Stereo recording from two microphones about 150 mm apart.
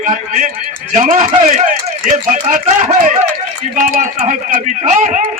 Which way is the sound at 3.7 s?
60° right (ahead or behind).